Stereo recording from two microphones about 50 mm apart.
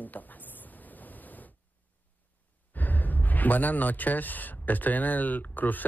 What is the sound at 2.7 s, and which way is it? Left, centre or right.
A man's voice, left.